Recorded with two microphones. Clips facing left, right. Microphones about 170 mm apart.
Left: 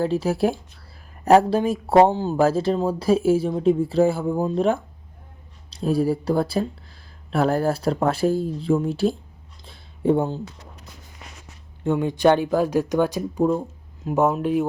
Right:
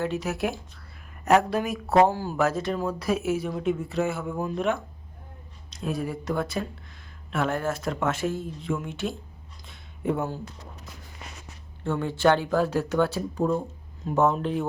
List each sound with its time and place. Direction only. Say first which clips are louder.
0.0 s speech: left 7 dB; 30° left (ahead or behind)
9.6 s a sound: left 7 dB; 30° left (ahead or behind)
11.8 s speech: left 5 dB; 15° left (ahead or behind)